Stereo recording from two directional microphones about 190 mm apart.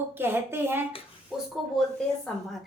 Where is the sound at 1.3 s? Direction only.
Centre (ahead or behind).